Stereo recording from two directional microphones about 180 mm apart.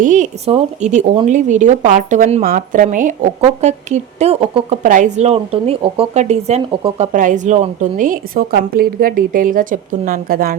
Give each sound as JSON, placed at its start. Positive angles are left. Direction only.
{"t": 0.0, "sound": "a woman's voice", "side_deg": -45}
{"t": 4.8, "sound": "speech", "side_deg": -45}
{"t": 7.1, "sound": "a woman's voice", "side_deg": -45}